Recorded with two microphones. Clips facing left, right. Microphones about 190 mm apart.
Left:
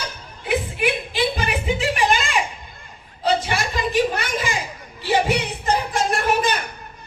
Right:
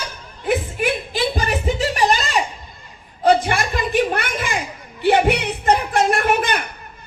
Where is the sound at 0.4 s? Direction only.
45° right (ahead or behind).